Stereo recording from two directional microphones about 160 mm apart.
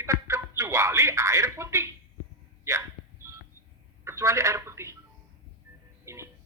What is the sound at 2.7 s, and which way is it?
Hiccup, 20° right (ahead or behind).